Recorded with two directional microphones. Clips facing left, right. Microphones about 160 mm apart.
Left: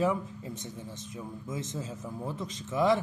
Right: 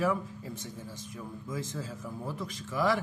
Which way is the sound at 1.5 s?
20° left (ahead or behind).